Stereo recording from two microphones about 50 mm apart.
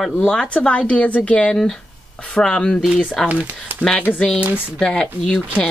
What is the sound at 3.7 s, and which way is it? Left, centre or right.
Speech, right.